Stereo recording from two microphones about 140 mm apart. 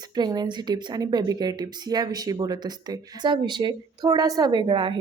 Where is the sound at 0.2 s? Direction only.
30° right (ahead or behind).